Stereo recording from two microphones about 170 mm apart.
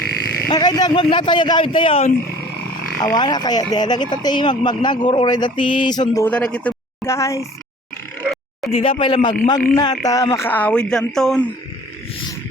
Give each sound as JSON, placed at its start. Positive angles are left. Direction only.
{"t": 0.3, "sound": "speech", "side_deg": 20}
{"t": 6.2, "sound": "speech", "side_deg": 5}
{"t": 8.7, "sound": "speech", "side_deg": 35}